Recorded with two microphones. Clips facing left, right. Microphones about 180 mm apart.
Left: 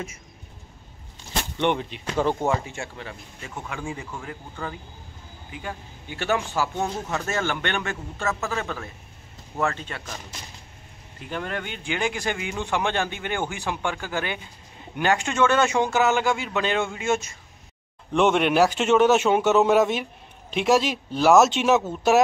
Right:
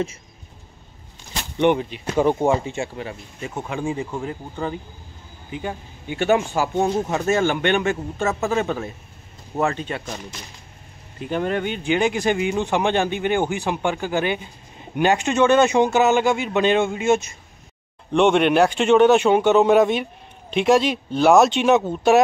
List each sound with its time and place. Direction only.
1.6 s a man's voice: 5° right (ahead or behind)
2.3 s speech: 20° right (ahead or behind)
11.1 s speech: 20° right (ahead or behind)
18.1 s a man's voice: centre (ahead or behind)